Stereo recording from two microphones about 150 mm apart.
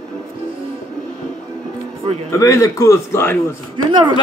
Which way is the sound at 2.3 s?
20° left (ahead or behind).